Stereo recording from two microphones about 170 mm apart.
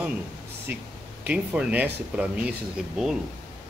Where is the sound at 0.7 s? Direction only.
10° right (ahead or behind).